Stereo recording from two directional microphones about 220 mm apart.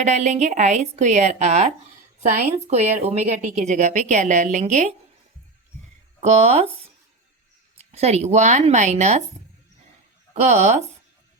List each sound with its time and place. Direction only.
0.0 s a woman's voice: 30° right (ahead or behind)
2.6 s a woman's voice: 30° right (ahead or behind)
6.1 s speech: 30° right (ahead or behind)
7.8 s a woman's voice: 30° right (ahead or behind)
10.3 s a woman's voice: 30° right (ahead or behind)